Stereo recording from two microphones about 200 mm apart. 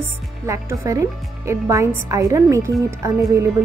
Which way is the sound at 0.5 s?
15° right (ahead or behind).